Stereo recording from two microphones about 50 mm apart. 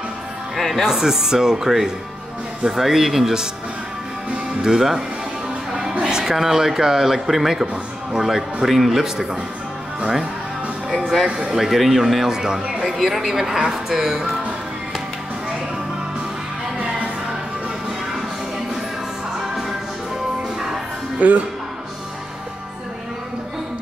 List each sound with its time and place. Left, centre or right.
0.6 s speech: centre
0.8 s speech: centre
4.6 s speech: centre
5.7 s music: centre
6.0 s a man's voice: centre
11.0 s music: centre
11.2 s speech: right
11.5 s speech: centre
12.8 s speech: centre
21.2 s speech: right